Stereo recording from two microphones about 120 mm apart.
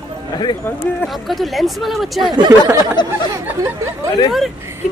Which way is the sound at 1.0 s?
Centre (ahead or behind).